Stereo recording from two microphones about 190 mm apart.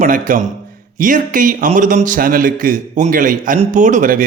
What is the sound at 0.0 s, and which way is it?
A man's voice, 45° right (ahead or behind).